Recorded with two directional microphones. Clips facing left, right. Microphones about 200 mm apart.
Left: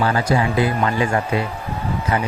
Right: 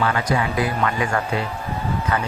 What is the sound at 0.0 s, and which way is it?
Speech, 30° left (ahead or behind).